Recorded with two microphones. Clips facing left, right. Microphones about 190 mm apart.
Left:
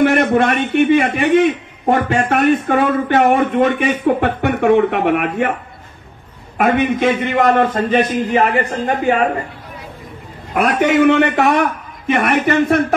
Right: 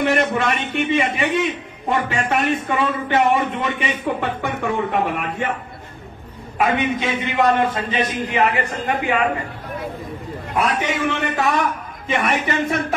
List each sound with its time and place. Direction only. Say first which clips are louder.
0.0 s a sound: left 6 dB; 55° left (ahead or behind)
0.8 s speech: left 4 dB; 55° left (ahead or behind)
6.6 s speech: left 5 dB; 60° left (ahead or behind)
8.4 s a man's voice: left 2 dB; 40° left (ahead or behind)
10.5 s speech: left 7 dB; 60° left (ahead or behind)